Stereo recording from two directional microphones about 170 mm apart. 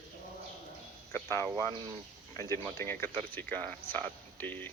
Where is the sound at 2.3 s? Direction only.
15° left (ahead or behind).